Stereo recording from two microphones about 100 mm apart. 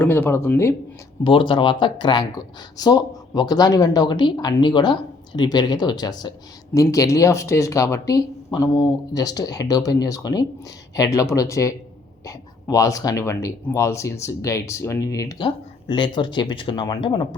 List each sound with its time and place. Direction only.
0.0 s speech: 20° left (ahead or behind)
1.2 s speech: 55° left (ahead or behind); by 15.4 s 35° left (ahead or behind)
15.4 s speech: 55° left (ahead or behind)